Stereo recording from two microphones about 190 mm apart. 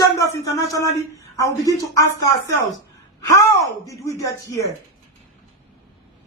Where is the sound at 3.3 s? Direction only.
15° left (ahead or behind).